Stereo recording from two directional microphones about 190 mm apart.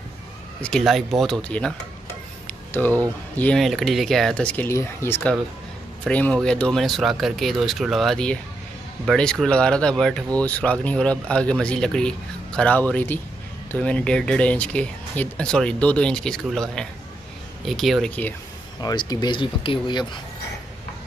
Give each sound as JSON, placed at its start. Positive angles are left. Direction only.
{"t": 0.6, "sound": "speech", "side_deg": 5}
{"t": 2.4, "sound": "a sound", "side_deg": 10}
{"t": 3.3, "sound": "speech", "side_deg": 5}
{"t": 18.8, "sound": "speech", "side_deg": 20}